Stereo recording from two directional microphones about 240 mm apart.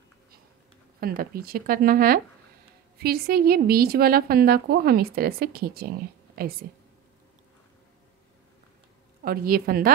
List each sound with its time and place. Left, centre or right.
1.0 s a woman's voice: right
9.2 s a woman's voice: right